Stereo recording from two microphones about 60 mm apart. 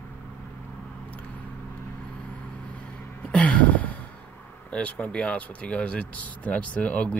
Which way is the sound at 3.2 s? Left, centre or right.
Centre.